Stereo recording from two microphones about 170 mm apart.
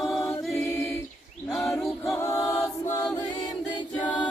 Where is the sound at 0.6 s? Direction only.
15° left (ahead or behind).